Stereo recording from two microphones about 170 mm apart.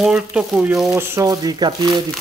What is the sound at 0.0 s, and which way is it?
Speech, 5° right (ahead or behind).